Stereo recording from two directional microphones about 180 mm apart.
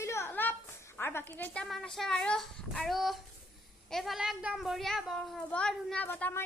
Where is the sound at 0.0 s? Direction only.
15° left (ahead or behind).